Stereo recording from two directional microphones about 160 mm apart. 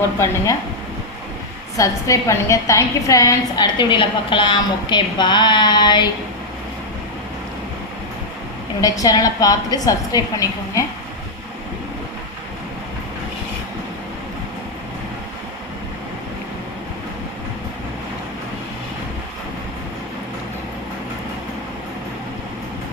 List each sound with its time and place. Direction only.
1.7 s a woman's voice: 20° left (ahead or behind)
8.8 s a woman's voice: 25° left (ahead or behind)